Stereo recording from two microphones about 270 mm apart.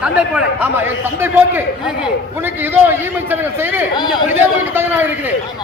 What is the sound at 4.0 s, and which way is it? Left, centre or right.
Speech, centre.